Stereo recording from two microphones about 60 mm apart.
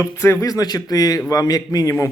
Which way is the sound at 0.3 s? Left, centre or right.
Left.